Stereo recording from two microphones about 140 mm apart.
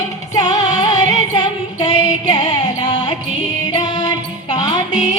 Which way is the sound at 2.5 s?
30° left (ahead or behind).